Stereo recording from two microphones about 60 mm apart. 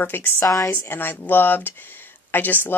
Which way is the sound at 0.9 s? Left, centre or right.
Left.